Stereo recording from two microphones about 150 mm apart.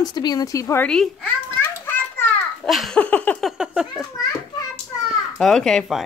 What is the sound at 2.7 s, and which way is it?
A woman's voice, centre (ahead or behind).